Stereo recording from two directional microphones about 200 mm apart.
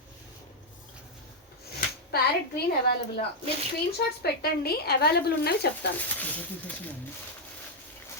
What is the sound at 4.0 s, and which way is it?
A woman's voice, 50° left (ahead or behind).